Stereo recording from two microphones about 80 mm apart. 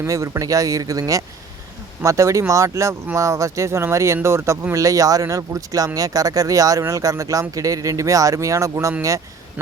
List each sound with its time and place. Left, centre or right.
0.0 s speech: right